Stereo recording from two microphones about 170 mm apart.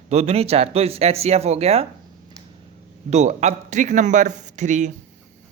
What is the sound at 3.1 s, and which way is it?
A man's voice, 40° right (ahead or behind).